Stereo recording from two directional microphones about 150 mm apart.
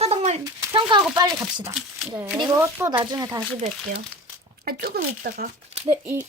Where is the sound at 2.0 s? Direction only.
15° right (ahead or behind).